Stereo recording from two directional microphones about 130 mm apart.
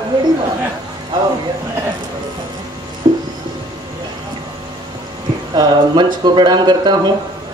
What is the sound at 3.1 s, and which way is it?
Music, 35° right (ahead or behind).